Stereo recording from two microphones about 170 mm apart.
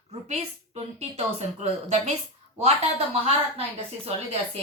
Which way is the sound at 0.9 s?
40° right (ahead or behind).